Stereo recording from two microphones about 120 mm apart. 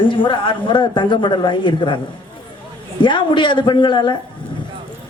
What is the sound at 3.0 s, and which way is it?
A man's voice, 40° left (ahead or behind).